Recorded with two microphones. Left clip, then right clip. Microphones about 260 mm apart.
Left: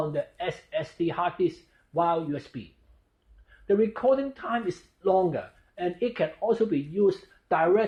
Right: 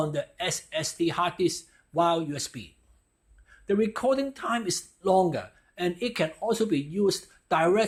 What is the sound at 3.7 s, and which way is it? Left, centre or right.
A man's voice, right.